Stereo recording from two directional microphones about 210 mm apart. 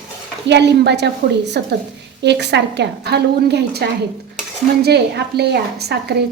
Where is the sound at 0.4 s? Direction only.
55° right (ahead or behind).